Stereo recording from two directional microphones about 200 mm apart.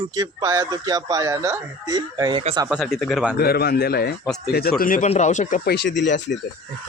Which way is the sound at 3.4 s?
50° left (ahead or behind).